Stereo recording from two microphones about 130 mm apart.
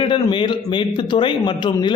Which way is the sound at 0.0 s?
40° left (ahead or behind).